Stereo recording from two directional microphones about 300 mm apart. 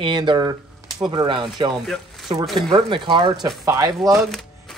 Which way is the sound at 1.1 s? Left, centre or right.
Centre.